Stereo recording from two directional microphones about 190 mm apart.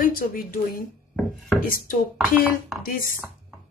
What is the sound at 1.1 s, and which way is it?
Chopping, centre (ahead or behind).